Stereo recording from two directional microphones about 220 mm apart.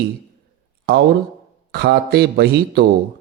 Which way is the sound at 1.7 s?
50° right (ahead or behind).